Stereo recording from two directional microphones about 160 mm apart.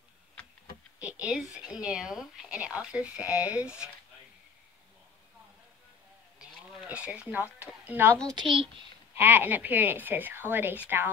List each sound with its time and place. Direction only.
0.9 s speech: 10° right (ahead or behind)
6.5 s speech: centre (ahead or behind)
8.3 s a woman's voice: 30° right (ahead or behind)
9.1 s a woman's voice: 10° right (ahead or behind)